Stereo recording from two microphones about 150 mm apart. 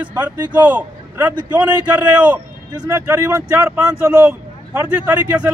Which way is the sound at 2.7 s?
25° right (ahead or behind).